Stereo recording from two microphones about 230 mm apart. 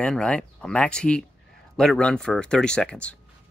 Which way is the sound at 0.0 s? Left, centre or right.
Centre.